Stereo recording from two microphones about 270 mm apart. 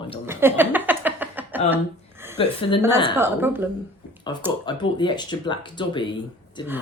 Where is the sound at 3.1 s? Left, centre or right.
Centre.